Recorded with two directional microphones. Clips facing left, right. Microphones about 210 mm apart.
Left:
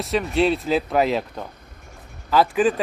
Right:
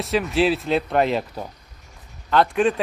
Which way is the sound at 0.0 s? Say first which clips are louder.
Even; centre (ahead or behind).